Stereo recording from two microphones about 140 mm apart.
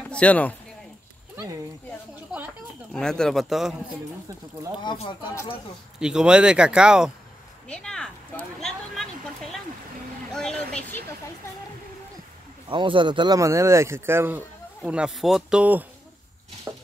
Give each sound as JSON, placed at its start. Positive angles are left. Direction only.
{"t": 0.1, "sound": "speech", "side_deg": 10}
{"t": 2.9, "sound": "speech", "side_deg": 5}
{"t": 5.9, "sound": "speech", "side_deg": -5}
{"t": 7.6, "sound": "a sound", "side_deg": 5}
{"t": 10.3, "sound": "speech", "side_deg": 5}
{"t": 12.6, "sound": "speech", "side_deg": -35}
{"t": 13.4, "sound": "speech", "side_deg": -20}
{"t": 16.7, "sound": "a sound", "side_deg": -20}